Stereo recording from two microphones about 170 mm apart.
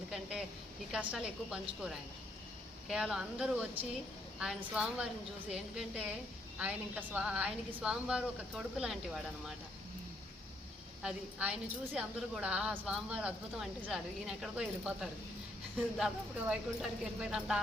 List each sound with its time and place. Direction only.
0.1 s a sound: 5° right (ahead or behind)
0.9 s a woman's voice: 5° right (ahead or behind)
11.0 s a woman's voice: 5° right (ahead or behind)